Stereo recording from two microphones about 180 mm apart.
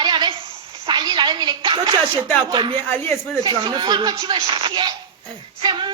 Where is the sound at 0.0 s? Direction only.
25° right (ahead or behind).